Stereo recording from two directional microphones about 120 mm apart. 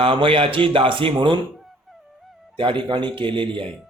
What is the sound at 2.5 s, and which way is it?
Speech, 45° right (ahead or behind).